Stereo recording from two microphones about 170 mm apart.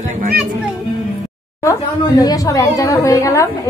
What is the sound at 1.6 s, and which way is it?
A woman's voice, 20° left (ahead or behind).